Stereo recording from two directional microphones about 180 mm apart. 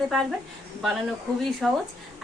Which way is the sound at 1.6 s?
5° left (ahead or behind).